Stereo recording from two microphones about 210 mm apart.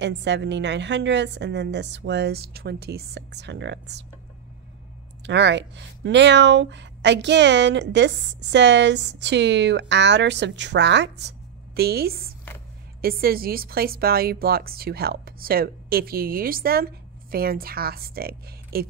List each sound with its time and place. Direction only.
0.0 s speech: 55° right (ahead or behind)
5.2 s a woman's voice: 55° right (ahead or behind)